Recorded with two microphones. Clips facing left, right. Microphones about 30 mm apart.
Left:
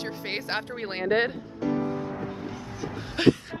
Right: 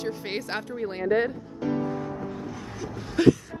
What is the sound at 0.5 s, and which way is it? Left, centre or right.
Speech, left.